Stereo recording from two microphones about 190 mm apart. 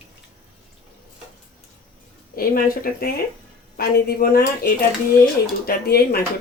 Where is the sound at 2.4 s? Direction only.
50° left (ahead or behind).